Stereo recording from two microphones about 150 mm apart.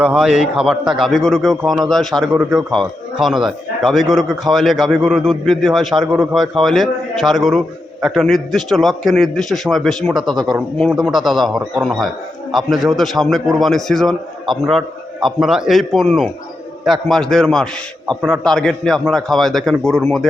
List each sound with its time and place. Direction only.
0.0 s a man's voice: centre (ahead or behind)
2.4 s a man's voice: 20° right (ahead or behind)
2.7 s a man's voice: centre (ahead or behind)
10.3 s a man's voice: 30° right (ahead or behind)
11.0 s a man's voice: centre (ahead or behind)